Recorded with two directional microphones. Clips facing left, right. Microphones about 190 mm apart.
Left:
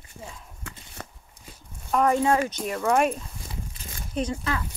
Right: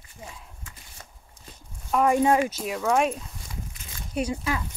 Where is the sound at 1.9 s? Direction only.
10° right (ahead or behind).